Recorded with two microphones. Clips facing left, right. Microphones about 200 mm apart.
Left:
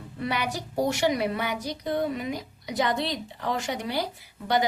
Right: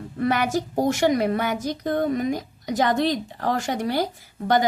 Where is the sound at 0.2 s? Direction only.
50° right (ahead or behind).